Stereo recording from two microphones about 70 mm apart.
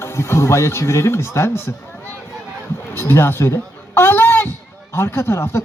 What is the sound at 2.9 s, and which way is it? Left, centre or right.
A man's voice, left.